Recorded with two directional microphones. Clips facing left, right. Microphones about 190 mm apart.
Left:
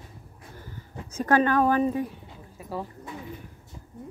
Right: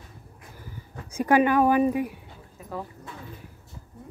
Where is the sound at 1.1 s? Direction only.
10° right (ahead or behind).